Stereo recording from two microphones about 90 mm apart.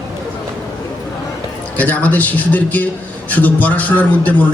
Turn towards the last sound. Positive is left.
turn(degrees=15)  # may be behind; listen again after turning